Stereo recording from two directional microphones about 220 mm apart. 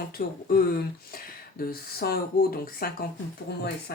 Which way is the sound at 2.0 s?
45° left (ahead or behind).